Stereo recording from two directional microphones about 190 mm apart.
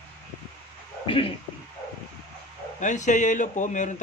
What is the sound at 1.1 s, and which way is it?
Speech, 30° left (ahead or behind).